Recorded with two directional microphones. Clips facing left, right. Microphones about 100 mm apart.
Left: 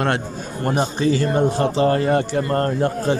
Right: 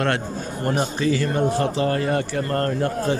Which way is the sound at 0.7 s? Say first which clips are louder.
Left 3 dB; 25° left (ahead or behind).